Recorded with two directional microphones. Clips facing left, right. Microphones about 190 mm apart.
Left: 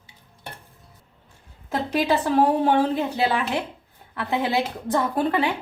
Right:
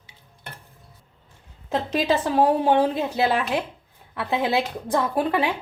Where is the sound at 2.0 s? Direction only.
15° right (ahead or behind).